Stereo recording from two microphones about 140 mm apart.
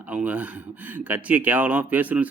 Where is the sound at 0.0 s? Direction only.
10° right (ahead or behind).